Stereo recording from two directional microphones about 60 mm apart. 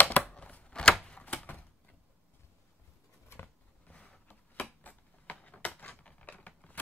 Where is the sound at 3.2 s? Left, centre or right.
Left.